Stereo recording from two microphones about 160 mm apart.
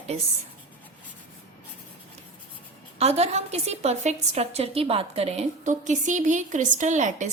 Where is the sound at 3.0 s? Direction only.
40° right (ahead or behind).